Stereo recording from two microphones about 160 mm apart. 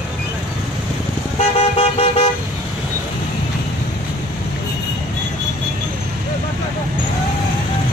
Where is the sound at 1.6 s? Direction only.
40° left (ahead or behind).